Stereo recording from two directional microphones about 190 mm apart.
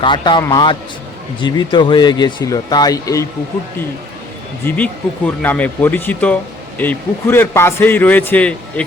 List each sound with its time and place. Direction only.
0.0 s speech: 25° left (ahead or behind)
4.6 s a man's voice: 10° left (ahead or behind)